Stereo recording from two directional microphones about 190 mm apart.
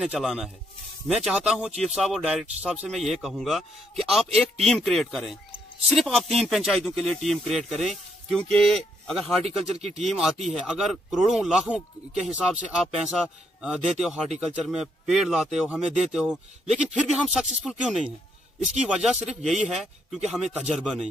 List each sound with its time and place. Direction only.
0.0 s speech: centre (ahead or behind)
9.4 s speech: 35° right (ahead or behind)
9.9 s speech: centre (ahead or behind)